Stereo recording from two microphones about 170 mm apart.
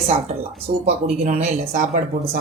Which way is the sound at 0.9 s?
40° right (ahead or behind).